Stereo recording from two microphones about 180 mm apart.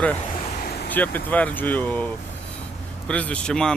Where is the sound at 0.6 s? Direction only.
65° left (ahead or behind).